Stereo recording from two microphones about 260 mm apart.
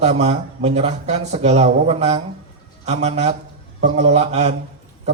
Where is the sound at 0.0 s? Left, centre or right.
Right.